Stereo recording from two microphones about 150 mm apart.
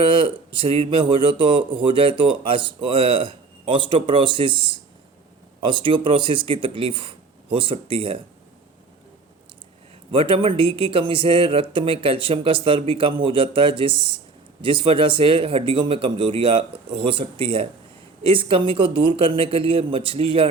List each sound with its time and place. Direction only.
0.0 s speech: 35° right (ahead or behind)
10.1 s speech: 35° right (ahead or behind)